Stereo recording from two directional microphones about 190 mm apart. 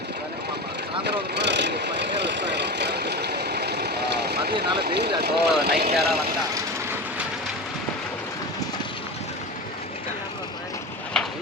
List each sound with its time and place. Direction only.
1.0 s vehicle: 65° right (ahead or behind)
4.8 s speech: 60° right (ahead or behind)